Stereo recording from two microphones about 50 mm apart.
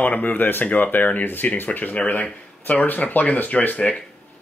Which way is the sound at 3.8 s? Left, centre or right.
Left.